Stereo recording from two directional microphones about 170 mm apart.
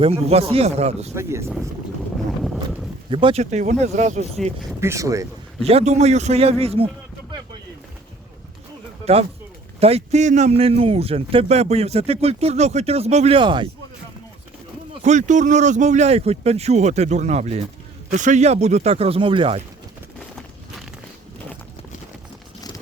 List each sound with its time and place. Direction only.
0.0 s a man's voice: 35° right (ahead or behind)
1.1 s speech: 15° right (ahead or behind)
3.1 s a man's voice: 30° right (ahead or behind)
3.4 s speech: 45° right (ahead or behind)
4.8 s speech: 15° right (ahead or behind)
5.6 s a man's voice: 40° right (ahead or behind)
9.8 s a man's voice: 40° right (ahead or behind)
15.0 s a man's voice: 45° right (ahead or behind)